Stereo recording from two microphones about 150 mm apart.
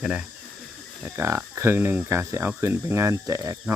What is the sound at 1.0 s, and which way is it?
Speech, 15° right (ahead or behind).